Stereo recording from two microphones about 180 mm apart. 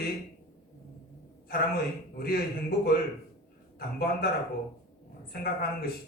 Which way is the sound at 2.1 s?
55° left (ahead or behind).